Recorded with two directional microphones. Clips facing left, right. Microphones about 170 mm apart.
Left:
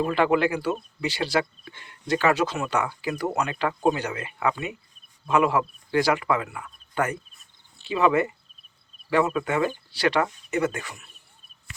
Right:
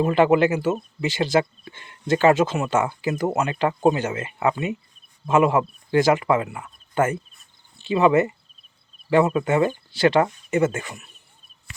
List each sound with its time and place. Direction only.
0.0 s speech: 20° right (ahead or behind)